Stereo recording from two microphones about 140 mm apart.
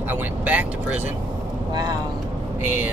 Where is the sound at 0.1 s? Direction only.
10° right (ahead or behind).